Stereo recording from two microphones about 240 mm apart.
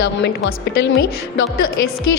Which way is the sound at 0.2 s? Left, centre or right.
Left.